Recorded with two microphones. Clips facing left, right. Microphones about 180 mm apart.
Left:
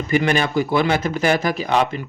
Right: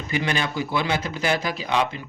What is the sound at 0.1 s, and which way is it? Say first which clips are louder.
Speech: left 7 dB; 50° left (ahead or behind).